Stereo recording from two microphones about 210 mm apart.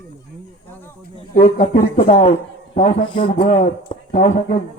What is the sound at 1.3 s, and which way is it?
A man's voice, 30° left (ahead or behind).